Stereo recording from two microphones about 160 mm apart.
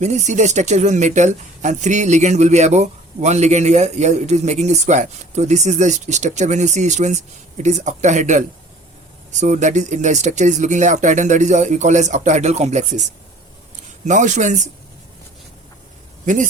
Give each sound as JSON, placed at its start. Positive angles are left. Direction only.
{"t": 0.0, "sound": "speech", "side_deg": -45}
{"t": 16.2, "sound": "speech", "side_deg": -55}